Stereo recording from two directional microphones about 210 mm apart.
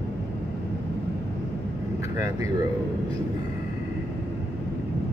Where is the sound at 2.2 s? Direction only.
15° right (ahead or behind).